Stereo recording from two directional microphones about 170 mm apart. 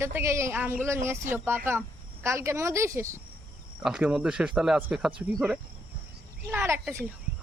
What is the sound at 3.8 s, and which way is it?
Speech, 5° right (ahead or behind).